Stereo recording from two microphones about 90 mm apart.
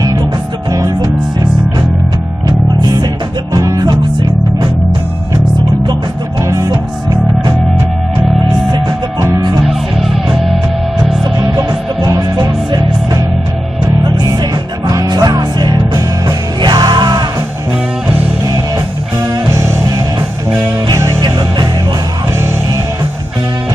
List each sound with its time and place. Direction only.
0.7 s music: 40° right (ahead or behind)
2.4 s music: 45° right (ahead or behind)
6.4 s music: 40° right (ahead or behind)
9.2 s music: 45° right (ahead or behind)
9.7 s music: 5° right (ahead or behind)
11.4 s music: 50° right (ahead or behind)
14.9 s music: 45° right (ahead or behind)
19.5 s music: 35° right (ahead or behind)
20.2 s music: 45° right (ahead or behind)